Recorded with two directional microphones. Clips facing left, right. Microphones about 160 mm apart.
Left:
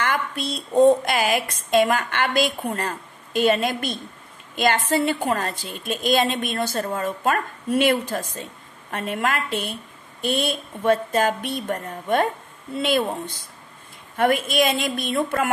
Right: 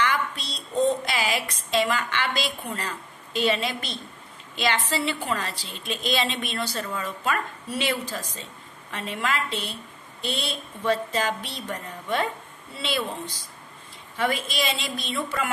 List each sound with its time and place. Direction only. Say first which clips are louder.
0.0 s speech: left 2 dB; 50° left (ahead or behind)